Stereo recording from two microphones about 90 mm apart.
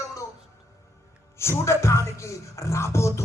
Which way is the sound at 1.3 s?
30° left (ahead or behind).